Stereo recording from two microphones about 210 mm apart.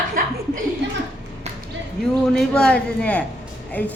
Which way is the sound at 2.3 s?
5° left (ahead or behind).